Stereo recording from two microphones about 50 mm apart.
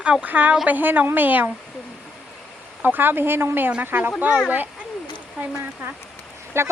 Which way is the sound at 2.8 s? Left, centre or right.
Right.